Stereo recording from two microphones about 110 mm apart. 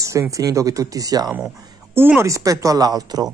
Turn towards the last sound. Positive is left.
turn(degrees=-35)  # may be behind; listen again after turning